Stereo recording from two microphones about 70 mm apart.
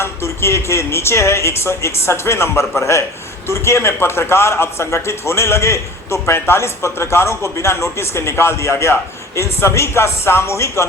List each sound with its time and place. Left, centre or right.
0.0 s a man's voice: left